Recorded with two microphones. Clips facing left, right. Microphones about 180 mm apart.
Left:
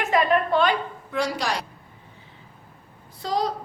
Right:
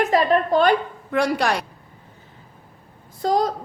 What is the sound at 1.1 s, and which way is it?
Speech, 60° right (ahead or behind).